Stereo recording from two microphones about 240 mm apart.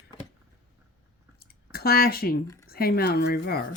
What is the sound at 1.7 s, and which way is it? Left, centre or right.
Speech, left.